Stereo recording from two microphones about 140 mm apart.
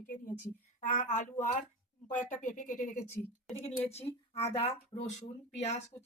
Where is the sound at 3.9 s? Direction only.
50° left (ahead or behind).